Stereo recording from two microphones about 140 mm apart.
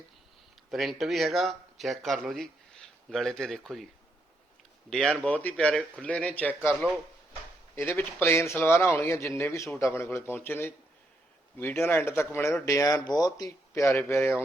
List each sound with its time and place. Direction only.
0.7 s speech: centre (ahead or behind)
5.2 s speech: 10° left (ahead or behind)
7.8 s speech: 15° left (ahead or behind)